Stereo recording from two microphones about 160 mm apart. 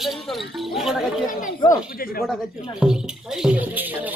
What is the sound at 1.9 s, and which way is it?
Speech, 65° left (ahead or behind).